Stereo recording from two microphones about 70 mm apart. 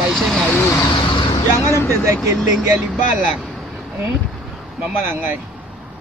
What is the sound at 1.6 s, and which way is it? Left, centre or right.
Speech, left.